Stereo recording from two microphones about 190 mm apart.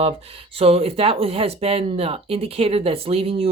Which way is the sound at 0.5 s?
30° right (ahead or behind).